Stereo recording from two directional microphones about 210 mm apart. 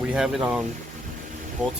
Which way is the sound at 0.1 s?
5° right (ahead or behind).